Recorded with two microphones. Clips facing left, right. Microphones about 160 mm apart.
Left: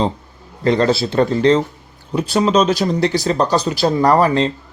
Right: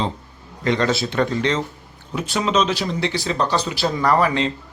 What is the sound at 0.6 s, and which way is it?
Speech, 35° left (ahead or behind).